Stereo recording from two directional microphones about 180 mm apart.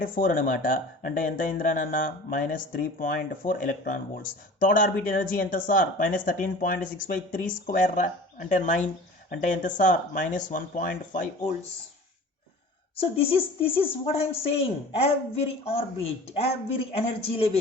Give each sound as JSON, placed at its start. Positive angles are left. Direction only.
{"t": 0.0, "sound": "speech", "side_deg": 50}
{"t": 13.0, "sound": "a woman's voice", "side_deg": 30}